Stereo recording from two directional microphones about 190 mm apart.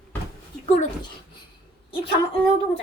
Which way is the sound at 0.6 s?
30° left (ahead or behind).